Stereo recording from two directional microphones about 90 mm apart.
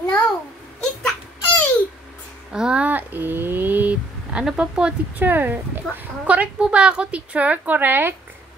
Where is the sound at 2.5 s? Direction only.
10° right (ahead or behind).